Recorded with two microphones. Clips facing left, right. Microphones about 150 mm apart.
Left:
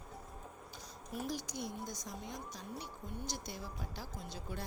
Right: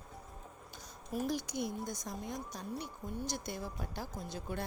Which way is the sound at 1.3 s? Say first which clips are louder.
Right 5 dB; 60° right (ahead or behind).